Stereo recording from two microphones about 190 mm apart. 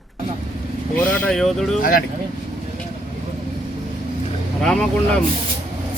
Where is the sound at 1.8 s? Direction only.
50° left (ahead or behind).